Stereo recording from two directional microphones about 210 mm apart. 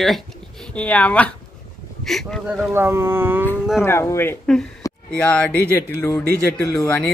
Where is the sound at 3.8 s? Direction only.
10° left (ahead or behind).